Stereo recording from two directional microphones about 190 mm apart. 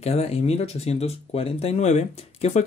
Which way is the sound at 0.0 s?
35° left (ahead or behind).